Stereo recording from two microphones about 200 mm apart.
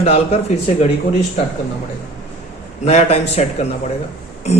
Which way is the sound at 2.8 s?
35° left (ahead or behind).